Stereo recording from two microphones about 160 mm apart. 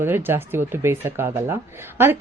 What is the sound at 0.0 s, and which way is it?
A woman's voice, 15° right (ahead or behind).